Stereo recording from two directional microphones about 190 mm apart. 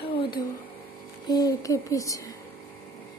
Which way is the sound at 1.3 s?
20° left (ahead or behind).